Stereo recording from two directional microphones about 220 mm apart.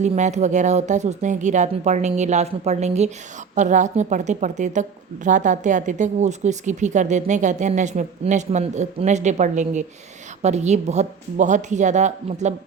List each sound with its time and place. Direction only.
0.0 s a woman's voice: 30° right (ahead or behind)